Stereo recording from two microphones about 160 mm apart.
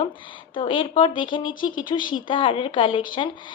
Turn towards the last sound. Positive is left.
turn(degrees=30)  # may be behind; listen again after turning